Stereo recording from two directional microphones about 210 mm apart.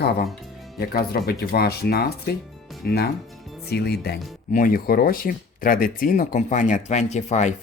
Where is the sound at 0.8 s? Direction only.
45° left (ahead or behind).